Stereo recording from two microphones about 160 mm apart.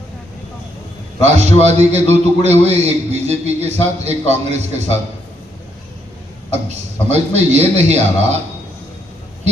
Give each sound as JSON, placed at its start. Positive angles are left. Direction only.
{"t": 1.6, "sound": "a man's voice", "side_deg": -45}
{"t": 6.5, "sound": "a man's voice", "side_deg": -45}